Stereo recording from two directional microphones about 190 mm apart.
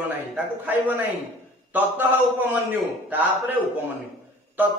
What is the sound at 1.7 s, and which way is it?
Speech, 10° right (ahead or behind).